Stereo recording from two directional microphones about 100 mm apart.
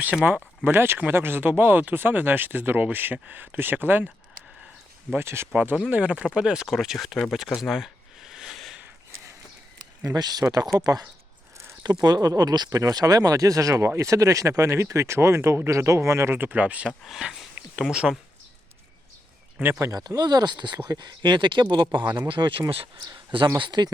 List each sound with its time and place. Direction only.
0.0 s speech: 15° right (ahead or behind)
5.1 s speech: 25° right (ahead or behind)
5.9 s speech: 15° right (ahead or behind)
10.2 s speech: 40° right (ahead or behind)
11.5 s a sound: 30° right (ahead or behind)
12.0 s speech: 40° right (ahead or behind); by 18.2 s 5° right (ahead or behind)
19.8 s speech: 40° right (ahead or behind)